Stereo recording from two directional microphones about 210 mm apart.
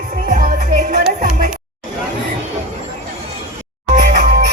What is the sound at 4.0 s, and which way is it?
Music, 40° right (ahead or behind).